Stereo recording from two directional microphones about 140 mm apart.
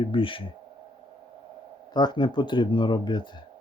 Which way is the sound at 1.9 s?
30° left (ahead or behind).